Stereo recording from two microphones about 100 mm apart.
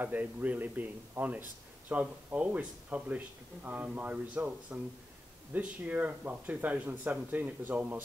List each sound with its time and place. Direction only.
0.0 s speech: 15° right (ahead or behind)